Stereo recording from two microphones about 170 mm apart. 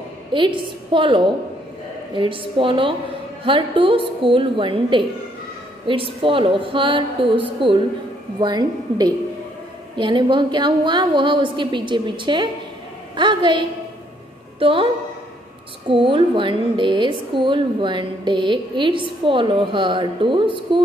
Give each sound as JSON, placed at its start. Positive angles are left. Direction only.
{"t": 0.3, "sound": "a woman's voice", "side_deg": -30}
{"t": 15.9, "sound": "a woman's voice", "side_deg": -30}